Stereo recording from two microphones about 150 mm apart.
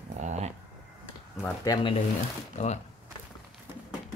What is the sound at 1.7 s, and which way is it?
Speech, 25° left (ahead or behind).